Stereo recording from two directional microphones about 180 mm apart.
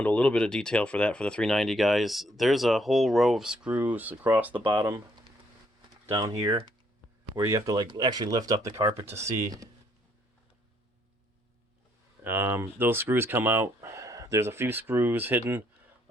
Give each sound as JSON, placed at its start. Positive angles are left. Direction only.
{"t": 0.0, "sound": "speech", "side_deg": 10}
{"t": 4.6, "sound": "speech", "side_deg": -25}
{"t": 6.1, "sound": "speech", "side_deg": -30}
{"t": 7.3, "sound": "speech", "side_deg": -15}
{"t": 12.2, "sound": "speech", "side_deg": -10}